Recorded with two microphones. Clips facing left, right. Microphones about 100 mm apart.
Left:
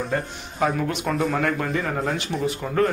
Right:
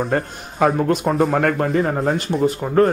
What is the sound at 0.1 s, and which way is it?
Speech, 50° right (ahead or behind).